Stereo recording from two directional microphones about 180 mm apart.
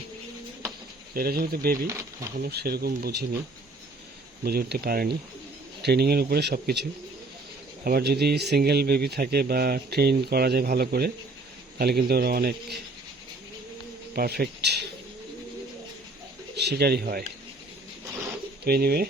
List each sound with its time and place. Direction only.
1.1 s speech: 55° right (ahead or behind)
4.4 s speech: 60° right (ahead or behind)
7.9 s speech: 60° right (ahead or behind)
14.2 s speech: 60° right (ahead or behind)
16.6 s speech: 65° right (ahead or behind)
18.6 s speech: 60° right (ahead or behind)